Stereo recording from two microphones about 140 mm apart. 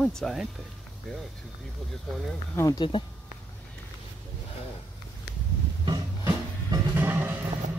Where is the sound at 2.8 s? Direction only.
35° left (ahead or behind).